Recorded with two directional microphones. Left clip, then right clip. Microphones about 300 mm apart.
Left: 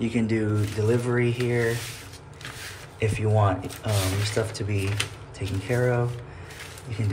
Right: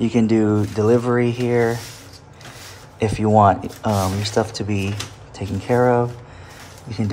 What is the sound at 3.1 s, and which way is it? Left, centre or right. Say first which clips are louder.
Speech: right 12 dB; centre.